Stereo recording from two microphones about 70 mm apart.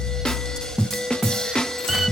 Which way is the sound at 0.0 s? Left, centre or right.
Centre.